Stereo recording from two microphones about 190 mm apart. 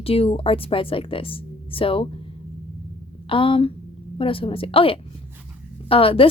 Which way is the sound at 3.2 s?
30° left (ahead or behind).